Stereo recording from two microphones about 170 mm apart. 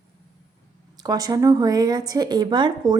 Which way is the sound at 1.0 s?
20° right (ahead or behind).